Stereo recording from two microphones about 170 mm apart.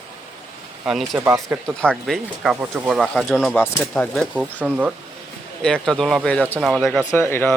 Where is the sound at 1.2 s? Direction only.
20° right (ahead or behind).